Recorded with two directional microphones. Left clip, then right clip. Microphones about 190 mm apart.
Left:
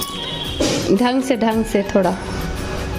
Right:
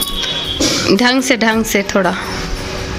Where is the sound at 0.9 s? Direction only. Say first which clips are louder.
Right 5 dB; 10° left (ahead or behind).